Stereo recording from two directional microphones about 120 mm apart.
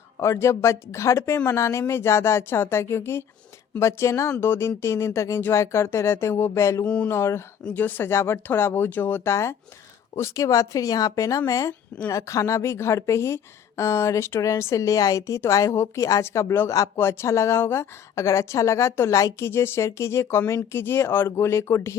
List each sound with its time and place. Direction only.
0.2 s speech: 25° left (ahead or behind)
6.8 s speech: 10° left (ahead or behind)
7.1 s speech: 20° left (ahead or behind)